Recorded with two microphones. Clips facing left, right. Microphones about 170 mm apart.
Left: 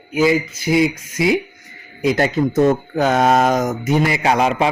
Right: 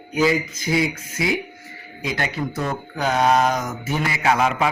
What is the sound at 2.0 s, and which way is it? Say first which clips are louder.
Speech: left 9 dB; 40° left (ahead or behind).